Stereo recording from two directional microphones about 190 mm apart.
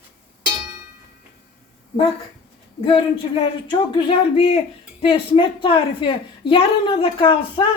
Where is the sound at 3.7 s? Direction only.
25° left (ahead or behind).